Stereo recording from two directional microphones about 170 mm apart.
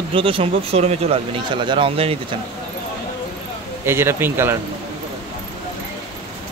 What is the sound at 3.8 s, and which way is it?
Speech, 15° right (ahead or behind).